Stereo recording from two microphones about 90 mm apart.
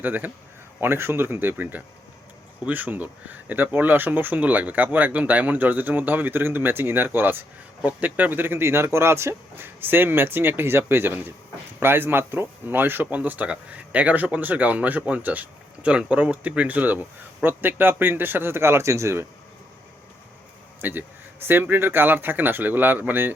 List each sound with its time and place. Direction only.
0.0 s speech: 20° right (ahead or behind)
20.8 s speech: 20° right (ahead or behind)